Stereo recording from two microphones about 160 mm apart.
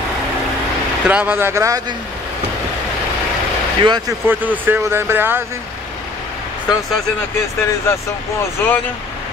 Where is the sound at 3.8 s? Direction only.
25° right (ahead or behind).